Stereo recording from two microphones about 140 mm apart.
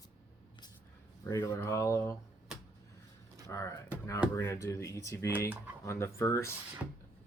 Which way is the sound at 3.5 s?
20° left (ahead or behind).